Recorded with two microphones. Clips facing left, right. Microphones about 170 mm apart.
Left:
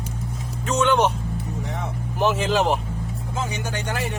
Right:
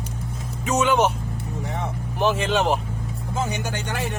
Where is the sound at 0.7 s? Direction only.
5° right (ahead or behind).